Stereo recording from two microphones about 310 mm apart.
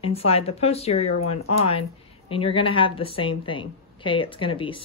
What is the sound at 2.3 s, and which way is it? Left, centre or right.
A woman's voice, centre.